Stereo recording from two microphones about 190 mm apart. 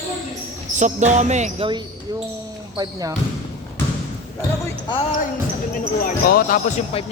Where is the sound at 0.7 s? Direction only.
40° right (ahead or behind).